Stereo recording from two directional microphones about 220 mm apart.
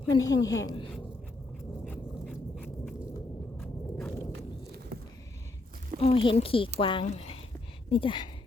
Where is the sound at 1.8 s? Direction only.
Centre (ahead or behind).